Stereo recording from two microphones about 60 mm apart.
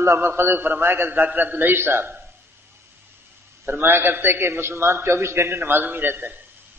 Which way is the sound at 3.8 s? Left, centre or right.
Right.